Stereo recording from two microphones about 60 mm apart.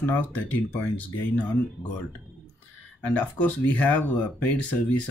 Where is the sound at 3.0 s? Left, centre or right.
Left.